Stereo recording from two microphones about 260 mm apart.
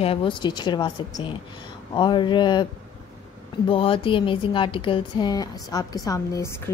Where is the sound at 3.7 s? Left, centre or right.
Centre.